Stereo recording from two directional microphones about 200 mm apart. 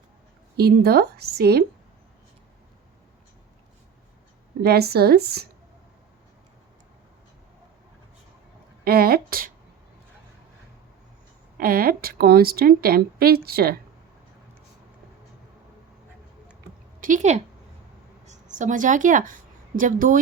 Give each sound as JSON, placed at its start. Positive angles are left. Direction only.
{"t": 0.5, "sound": "speech", "side_deg": -50}
{"t": 4.6, "sound": "speech", "side_deg": -50}
{"t": 8.8, "sound": "speech", "side_deg": -50}
{"t": 11.5, "sound": "speech", "side_deg": -45}
{"t": 17.0, "sound": "a woman's voice", "side_deg": -40}